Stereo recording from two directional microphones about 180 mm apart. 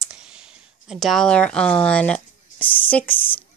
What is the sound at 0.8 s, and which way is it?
Speech, centre (ahead or behind).